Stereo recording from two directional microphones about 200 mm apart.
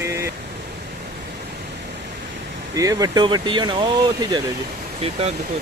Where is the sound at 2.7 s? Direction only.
15° right (ahead or behind).